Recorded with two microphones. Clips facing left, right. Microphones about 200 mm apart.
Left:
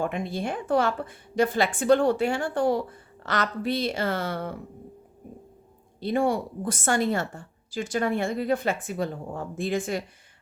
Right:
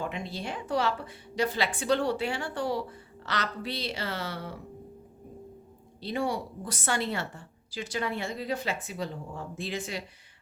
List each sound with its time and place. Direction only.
0.0 s a woman's voice: 50° left (ahead or behind)
6.0 s a woman's voice: 50° left (ahead or behind)